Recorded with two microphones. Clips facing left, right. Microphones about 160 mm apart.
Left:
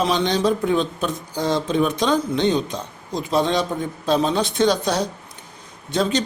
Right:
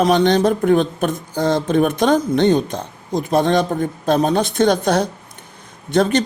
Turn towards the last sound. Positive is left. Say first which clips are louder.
# right 5 dB
turn(degrees=-55)  # may be behind; listen again after turning